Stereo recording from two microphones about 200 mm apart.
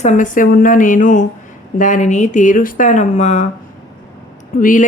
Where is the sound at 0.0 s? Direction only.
40° left (ahead or behind).